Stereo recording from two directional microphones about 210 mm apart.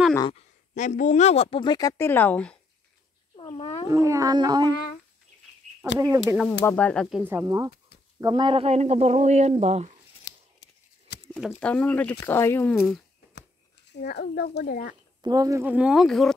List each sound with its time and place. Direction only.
0.3 s speech: 35° left (ahead or behind); by 2.6 s 5° left (ahead or behind)
3.3 s speech: 25° left (ahead or behind)
3.9 s speech: 15° right (ahead or behind)
5.9 s speech: 15° right (ahead or behind)
6.6 s speech: 5° left (ahead or behind); by 9.9 s 30° right (ahead or behind)
10.3 s scissors: 50° left (ahead or behind)
11.6 s speech: 5° left (ahead or behind)
13.9 s a child's voice: 50° left (ahead or behind)
15.2 s speech: 15° right (ahead or behind); by 16.3 s centre (ahead or behind)